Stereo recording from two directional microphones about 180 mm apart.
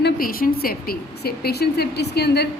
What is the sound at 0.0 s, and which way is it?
A woman's voice, 55° left (ahead or behind).